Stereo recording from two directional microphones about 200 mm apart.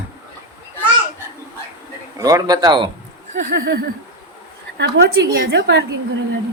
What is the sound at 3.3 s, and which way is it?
A woman's voice, 60° right (ahead or behind).